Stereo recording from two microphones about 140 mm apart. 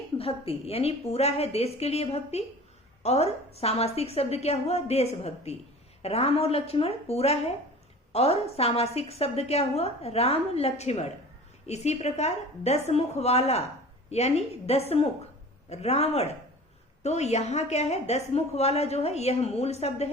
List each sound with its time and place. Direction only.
0.2 s a woman's voice: 45° left (ahead or behind)